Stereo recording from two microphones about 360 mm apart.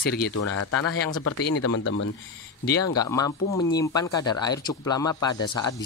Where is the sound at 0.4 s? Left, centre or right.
Left.